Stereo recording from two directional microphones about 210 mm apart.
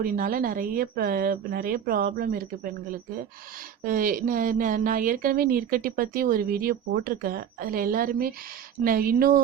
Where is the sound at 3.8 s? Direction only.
40° right (ahead or behind).